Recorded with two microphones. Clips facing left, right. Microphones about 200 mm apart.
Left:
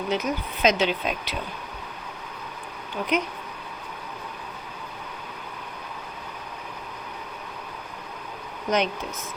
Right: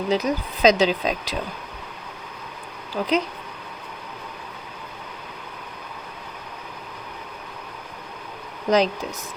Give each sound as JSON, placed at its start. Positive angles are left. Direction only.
{"t": 0.1, "sound": "speech", "side_deg": -35}
{"t": 2.9, "sound": "speech", "side_deg": -35}
{"t": 8.7, "sound": "speech", "side_deg": -35}